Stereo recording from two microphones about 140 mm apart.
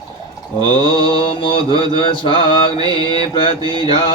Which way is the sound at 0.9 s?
30° right (ahead or behind).